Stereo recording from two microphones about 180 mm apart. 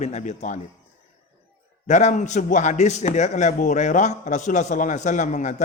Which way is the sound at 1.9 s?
40° left (ahead or behind).